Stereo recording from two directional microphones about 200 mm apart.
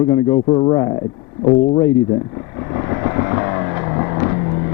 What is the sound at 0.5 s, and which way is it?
Speech, 20° left (ahead or behind).